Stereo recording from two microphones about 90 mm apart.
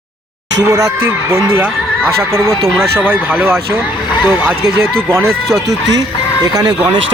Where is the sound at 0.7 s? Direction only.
35° right (ahead or behind).